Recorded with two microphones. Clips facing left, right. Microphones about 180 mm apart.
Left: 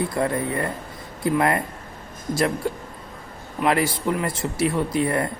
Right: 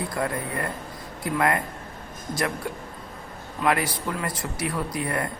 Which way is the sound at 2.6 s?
30° left (ahead or behind).